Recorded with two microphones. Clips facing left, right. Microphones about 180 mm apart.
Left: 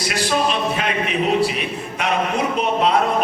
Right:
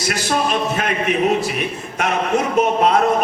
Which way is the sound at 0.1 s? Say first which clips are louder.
Right 1 dB; 45° right (ahead or behind).